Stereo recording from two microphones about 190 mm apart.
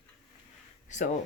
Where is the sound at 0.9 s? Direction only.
40° left (ahead or behind).